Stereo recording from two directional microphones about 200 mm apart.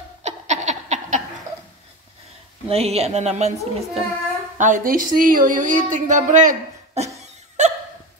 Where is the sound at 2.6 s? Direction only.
30° right (ahead or behind).